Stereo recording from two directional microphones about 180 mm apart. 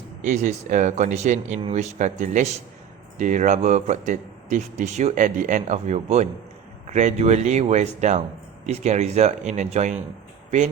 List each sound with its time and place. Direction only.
0.2 s speech: 40° right (ahead or behind)